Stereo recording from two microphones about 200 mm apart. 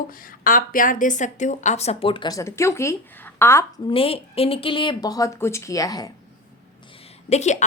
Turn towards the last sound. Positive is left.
turn(degrees=35)  # may be behind; listen again after turning